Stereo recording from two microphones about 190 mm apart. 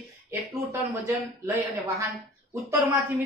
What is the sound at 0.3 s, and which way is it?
Speech, 15° right (ahead or behind).